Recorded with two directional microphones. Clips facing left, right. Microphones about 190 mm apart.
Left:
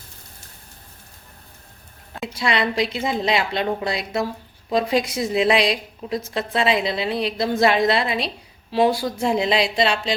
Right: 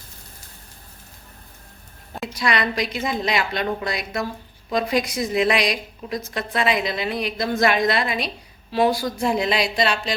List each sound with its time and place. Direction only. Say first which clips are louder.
2.2 s a woman's voice: left 1 dB; 25° left (ahead or behind)